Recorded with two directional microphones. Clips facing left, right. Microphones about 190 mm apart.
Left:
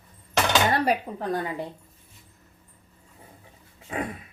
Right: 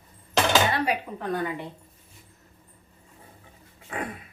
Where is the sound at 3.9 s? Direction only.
20° left (ahead or behind).